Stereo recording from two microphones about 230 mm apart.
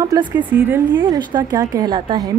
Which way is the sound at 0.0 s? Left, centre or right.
Centre.